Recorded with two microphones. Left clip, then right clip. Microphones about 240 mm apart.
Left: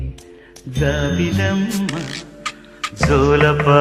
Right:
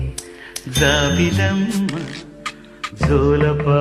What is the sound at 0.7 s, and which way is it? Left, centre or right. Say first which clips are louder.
Music: right 5 dB; right.